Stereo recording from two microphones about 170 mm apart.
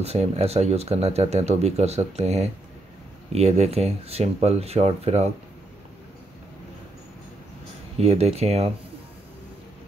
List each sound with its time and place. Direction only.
0.0 s speech: 40° right (ahead or behind)
8.0 s speech: 40° right (ahead or behind)